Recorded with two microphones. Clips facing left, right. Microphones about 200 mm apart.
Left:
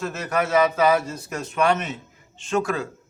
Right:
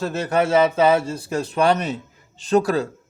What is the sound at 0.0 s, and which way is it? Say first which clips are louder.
Speech: right 4 dB; 30° right (ahead or behind).